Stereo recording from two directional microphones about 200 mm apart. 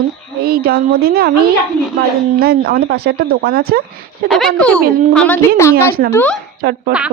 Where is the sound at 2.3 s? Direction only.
50° right (ahead or behind).